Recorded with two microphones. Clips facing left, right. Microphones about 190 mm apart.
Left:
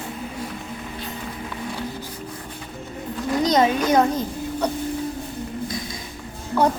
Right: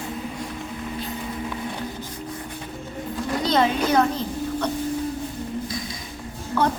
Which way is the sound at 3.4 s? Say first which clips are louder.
Left 2 dB; 15° left (ahead or behind).